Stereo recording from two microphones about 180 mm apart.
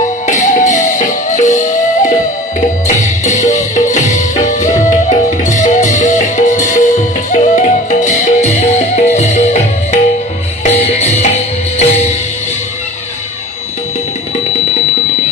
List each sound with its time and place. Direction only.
0.4 s music: 45° left (ahead or behind)
10.6 s music: 35° left (ahead or behind)